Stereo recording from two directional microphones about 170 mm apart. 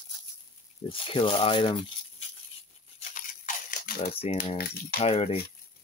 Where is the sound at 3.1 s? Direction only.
50° left (ahead or behind).